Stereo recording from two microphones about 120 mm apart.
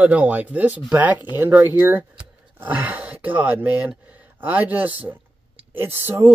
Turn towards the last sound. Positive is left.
turn(degrees=-20)  # may be behind; listen again after turning